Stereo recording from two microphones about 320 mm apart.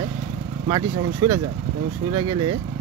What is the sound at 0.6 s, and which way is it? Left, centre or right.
Speech, centre.